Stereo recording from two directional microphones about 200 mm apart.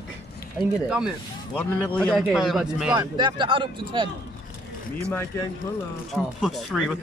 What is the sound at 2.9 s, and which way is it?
Speech, 20° right (ahead or behind).